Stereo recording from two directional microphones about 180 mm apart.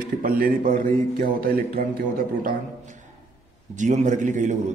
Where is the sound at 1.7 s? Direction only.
50° right (ahead or behind).